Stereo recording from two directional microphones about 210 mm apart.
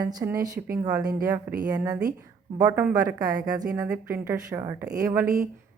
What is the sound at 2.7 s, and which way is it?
Speech, 5° right (ahead or behind).